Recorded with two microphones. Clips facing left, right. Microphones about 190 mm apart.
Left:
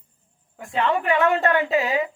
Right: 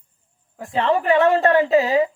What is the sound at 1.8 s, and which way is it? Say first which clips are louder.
Speech: right 5 dB; 35° right (ahead or behind).